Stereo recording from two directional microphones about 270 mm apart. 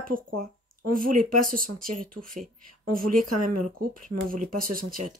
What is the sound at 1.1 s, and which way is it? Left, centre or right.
Speech, right.